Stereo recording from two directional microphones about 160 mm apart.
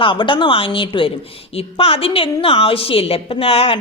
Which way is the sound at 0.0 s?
30° left (ahead or behind).